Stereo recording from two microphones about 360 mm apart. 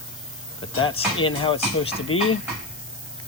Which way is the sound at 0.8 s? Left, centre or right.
Centre.